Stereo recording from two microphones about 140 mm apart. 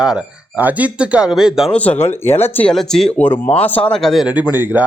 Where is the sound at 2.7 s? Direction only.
5° left (ahead or behind).